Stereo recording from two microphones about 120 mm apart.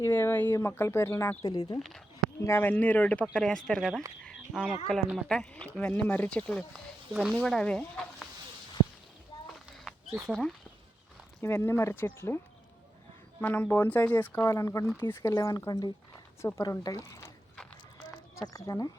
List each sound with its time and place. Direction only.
0.0 s speech: 20° left (ahead or behind)
2.4 s speech: 20° left (ahead or behind); by 4.0 s centre (ahead or behind)
4.2 s a sound: 5° left (ahead or behind)
5.1 s speech: 5° left (ahead or behind)
7.1 s speech: 5° right (ahead or behind)
9.5 s a sound: centre (ahead or behind)
11.4 s speech: 20° left (ahead or behind)
13.4 s speech: 15° left (ahead or behind); by 15.9 s 35° left (ahead or behind)
16.4 s speech: 25° left (ahead or behind)
17.1 s a sound: 25° left (ahead or behind)
18.4 s speech: 30° left (ahead or behind)